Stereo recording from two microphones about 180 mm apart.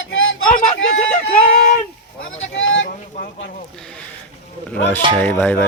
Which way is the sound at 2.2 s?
90° left.